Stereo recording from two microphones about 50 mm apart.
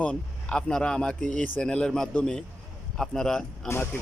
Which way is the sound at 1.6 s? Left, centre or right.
Centre.